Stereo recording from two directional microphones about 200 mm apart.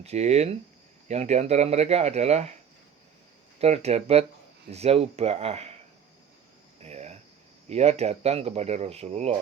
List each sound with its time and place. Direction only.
0.0 s speech: 35° right (ahead or behind)
3.6 s speech: 30° right (ahead or behind)
6.7 s cricket: 35° right (ahead or behind)
7.7 s speech: 30° right (ahead or behind)